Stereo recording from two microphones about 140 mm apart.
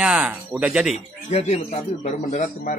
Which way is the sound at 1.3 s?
50° left (ahead or behind).